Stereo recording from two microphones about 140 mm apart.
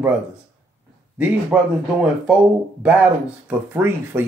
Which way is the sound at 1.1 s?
10° right (ahead or behind).